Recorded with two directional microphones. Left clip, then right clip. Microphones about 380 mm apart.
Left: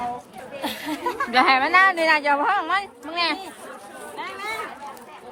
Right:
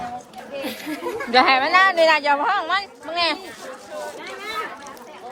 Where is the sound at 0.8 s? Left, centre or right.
Centre.